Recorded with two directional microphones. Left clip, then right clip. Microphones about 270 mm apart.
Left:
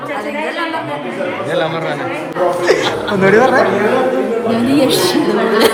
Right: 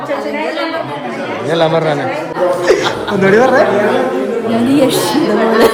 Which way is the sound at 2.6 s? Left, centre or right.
Centre.